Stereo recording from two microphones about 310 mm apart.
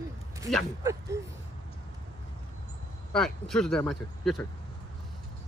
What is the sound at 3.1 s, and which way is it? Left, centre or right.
Speech, centre.